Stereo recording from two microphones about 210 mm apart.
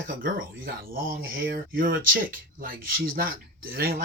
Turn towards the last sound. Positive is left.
turn(degrees=-45)  # may be behind; listen again after turning